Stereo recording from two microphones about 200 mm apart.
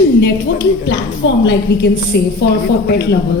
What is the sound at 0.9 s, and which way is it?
A woman's voice, 65° left (ahead or behind).